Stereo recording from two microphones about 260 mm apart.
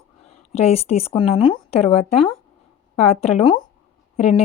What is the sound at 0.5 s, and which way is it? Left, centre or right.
Speech, left.